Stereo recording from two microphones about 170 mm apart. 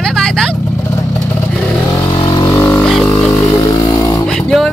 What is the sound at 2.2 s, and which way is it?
Vehicle, 20° left (ahead or behind).